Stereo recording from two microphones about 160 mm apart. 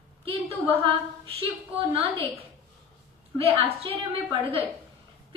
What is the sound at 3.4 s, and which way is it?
A woman's voice, 35° right (ahead or behind).